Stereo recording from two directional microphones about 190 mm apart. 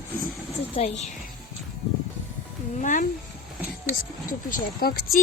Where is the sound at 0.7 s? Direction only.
35° left (ahead or behind).